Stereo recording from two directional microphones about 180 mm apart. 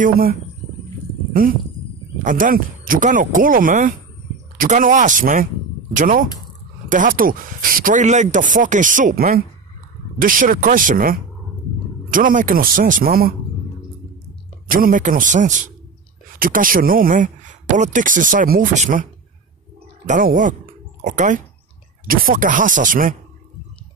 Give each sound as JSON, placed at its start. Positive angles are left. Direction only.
{"t": 0.0, "sound": "speech", "side_deg": -55}
{"t": 14.7, "sound": "speech", "side_deg": -50}
{"t": 20.1, "sound": "speech", "side_deg": -50}